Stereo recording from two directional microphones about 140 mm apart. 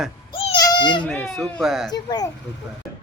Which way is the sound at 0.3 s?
40° left (ahead or behind).